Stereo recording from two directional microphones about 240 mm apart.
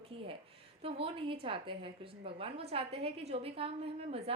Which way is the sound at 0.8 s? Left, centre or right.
Right.